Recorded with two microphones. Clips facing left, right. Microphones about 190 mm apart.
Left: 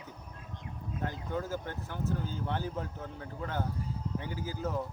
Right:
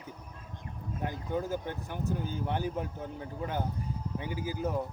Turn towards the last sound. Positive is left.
turn(degrees=-15)  # may be behind; listen again after turning